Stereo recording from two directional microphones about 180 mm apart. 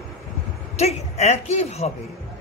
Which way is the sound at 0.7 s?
35° left (ahead or behind).